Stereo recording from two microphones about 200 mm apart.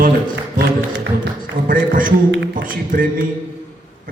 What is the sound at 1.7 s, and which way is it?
A man's voice, 45° right (ahead or behind).